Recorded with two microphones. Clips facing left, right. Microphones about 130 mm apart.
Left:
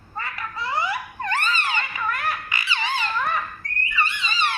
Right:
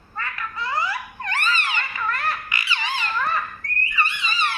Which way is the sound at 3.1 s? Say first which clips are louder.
Even; 10° left (ahead or behind).